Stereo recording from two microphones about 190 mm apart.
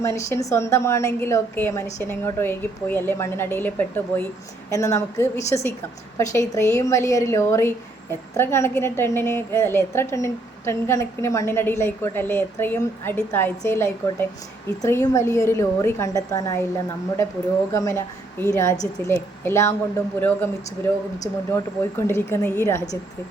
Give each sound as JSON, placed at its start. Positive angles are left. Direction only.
{"t": 0.0, "sound": "a woman's voice", "side_deg": 15}
{"t": 17.7, "sound": "a woman's voice", "side_deg": 15}